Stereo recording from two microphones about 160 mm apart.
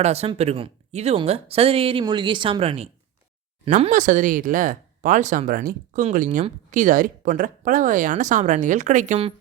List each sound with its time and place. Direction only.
0.0 s speech: 40° right (ahead or behind)